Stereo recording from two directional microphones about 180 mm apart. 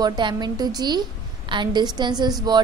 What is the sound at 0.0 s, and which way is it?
A woman's voice, 25° right (ahead or behind).